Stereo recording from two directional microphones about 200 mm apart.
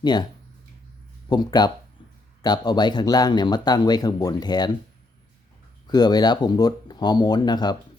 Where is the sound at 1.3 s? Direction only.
20° left (ahead or behind).